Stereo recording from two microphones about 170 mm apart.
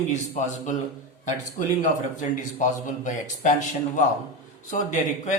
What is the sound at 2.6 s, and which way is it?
Speech, 50° left (ahead or behind).